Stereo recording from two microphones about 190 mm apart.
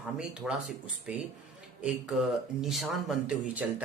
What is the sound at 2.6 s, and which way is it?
Speech, centre (ahead or behind).